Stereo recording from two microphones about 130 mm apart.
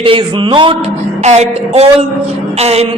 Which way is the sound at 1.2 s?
60° right (ahead or behind).